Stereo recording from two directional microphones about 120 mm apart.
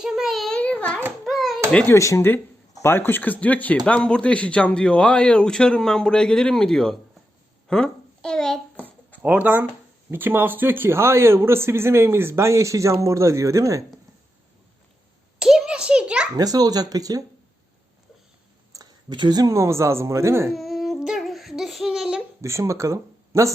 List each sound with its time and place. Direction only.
0.0 s a child's voice: 5° right (ahead or behind)
1.2 s a sound: centre (ahead or behind)
1.7 s a man's voice: 15° left (ahead or behind)
2.0 s a man's voice: 25° left (ahead or behind); by 8.6 s 5° left (ahead or behind)
9.2 s speech: 15° right (ahead or behind)
15.4 s a sound: 5° right (ahead or behind)
16.3 s speech: 30° right (ahead or behind)
18.7 s speech: 35° right (ahead or behind)
20.5 s a sound: centre (ahead or behind)
22.4 s speech: 25° right (ahead or behind)